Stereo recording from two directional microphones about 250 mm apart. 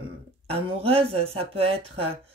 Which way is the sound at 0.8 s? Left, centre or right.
Right.